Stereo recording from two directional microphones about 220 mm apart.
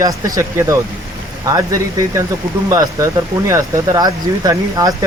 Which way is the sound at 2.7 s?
15° right (ahead or behind).